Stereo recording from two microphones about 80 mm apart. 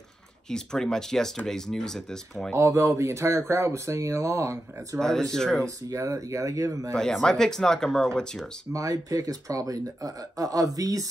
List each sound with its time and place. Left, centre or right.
0.5 s speech: centre
2.5 s speech: right
5.3 s speech: centre
5.9 s speech: right
7.0 s speech: centre
8.7 s speech: right